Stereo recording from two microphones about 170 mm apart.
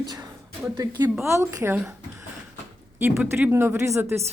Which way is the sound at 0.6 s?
15° right (ahead or behind).